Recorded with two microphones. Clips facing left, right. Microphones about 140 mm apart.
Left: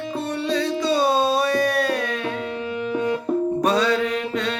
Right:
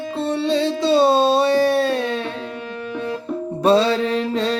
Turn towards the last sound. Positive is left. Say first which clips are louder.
# right 4 dB
turn(degrees=-30)  # may be behind; listen again after turning